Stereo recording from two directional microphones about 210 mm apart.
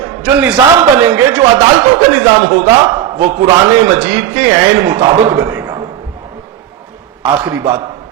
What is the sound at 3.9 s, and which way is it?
A man's voice, 5° right (ahead or behind).